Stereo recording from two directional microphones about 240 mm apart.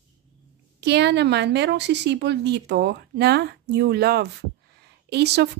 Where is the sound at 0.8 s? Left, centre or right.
Right.